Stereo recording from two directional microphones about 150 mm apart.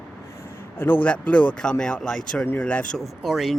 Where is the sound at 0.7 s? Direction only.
15° left (ahead or behind).